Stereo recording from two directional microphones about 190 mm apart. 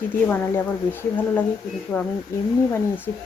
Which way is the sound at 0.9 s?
10° left (ahead or behind).